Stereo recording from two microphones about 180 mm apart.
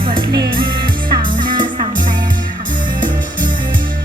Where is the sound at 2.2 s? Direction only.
50° right (ahead or behind).